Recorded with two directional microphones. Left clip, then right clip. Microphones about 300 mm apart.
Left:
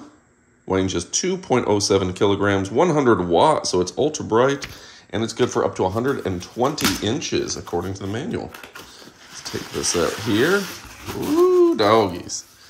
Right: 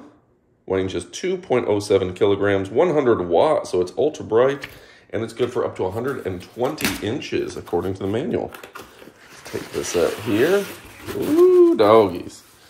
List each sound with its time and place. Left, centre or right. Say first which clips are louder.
0.7 s speech: left 1 dB; centre
11.7 s speech: right 3 dB; centre